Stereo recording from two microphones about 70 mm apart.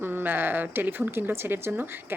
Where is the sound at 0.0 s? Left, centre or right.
Right.